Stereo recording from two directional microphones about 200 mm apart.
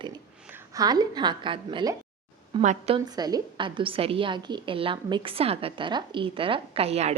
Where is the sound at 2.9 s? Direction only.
20° right (ahead or behind).